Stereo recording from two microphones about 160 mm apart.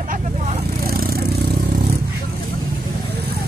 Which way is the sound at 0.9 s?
70° right (ahead or behind).